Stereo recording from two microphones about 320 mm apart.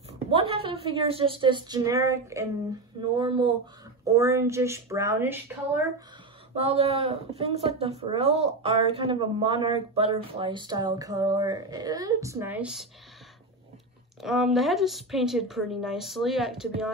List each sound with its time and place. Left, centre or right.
0.3 s a woman's voice: centre
6.5 s speech: centre
14.2 s speech: centre